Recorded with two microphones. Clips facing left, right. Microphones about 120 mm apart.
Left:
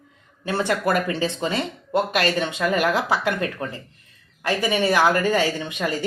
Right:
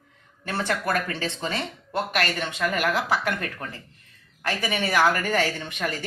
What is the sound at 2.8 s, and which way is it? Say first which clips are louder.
Speech: left 3 dB; 25° left (ahead or behind).